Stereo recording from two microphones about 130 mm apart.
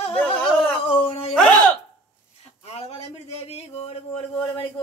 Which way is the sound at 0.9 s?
45° left (ahead or behind).